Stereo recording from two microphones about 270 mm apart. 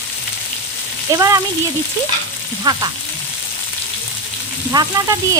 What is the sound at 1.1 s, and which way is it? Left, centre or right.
Speech, centre.